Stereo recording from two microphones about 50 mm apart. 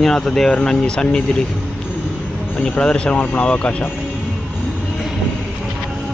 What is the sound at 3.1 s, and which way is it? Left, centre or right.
Speech, left.